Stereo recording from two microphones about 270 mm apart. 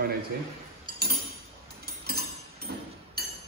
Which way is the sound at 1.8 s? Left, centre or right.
Right.